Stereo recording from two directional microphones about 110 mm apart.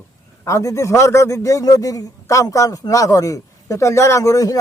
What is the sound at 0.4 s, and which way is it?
A man's voice, 30° left (ahead or behind).